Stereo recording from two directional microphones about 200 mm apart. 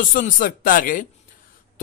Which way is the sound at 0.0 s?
45° left (ahead or behind).